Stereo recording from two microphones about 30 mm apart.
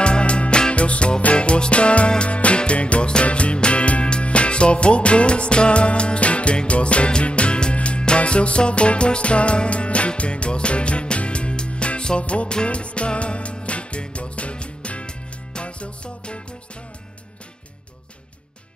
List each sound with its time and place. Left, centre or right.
0.0 s music: left